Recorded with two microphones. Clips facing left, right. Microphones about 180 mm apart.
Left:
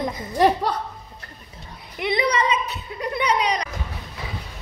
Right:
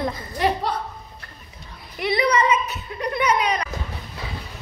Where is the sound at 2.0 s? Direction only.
20° left (ahead or behind).